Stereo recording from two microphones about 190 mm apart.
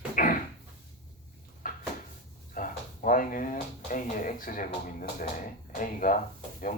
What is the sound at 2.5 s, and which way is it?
Speech, 45° left (ahead or behind).